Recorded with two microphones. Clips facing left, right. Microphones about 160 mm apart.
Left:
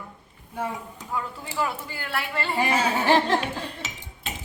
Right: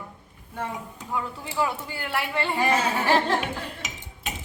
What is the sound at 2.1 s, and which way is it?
Speech, 15° right (ahead or behind).